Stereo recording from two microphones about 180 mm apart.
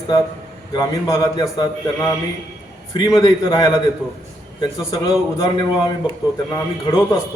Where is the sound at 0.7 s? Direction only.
20° left (ahead or behind).